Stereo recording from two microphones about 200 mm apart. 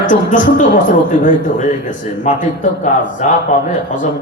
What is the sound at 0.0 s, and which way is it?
A man's voice, 40° left (ahead or behind).